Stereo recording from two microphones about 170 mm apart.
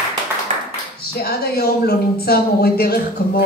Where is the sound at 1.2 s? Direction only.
70° left (ahead or behind).